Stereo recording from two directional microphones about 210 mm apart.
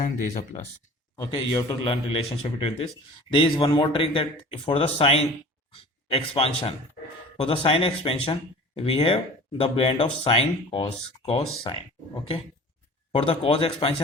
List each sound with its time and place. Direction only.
1.1 s a man's voice: 20° left (ahead or behind)
13.1 s speech: 25° left (ahead or behind)